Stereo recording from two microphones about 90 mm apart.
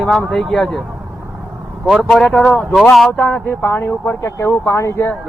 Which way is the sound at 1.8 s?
Centre (ahead or behind).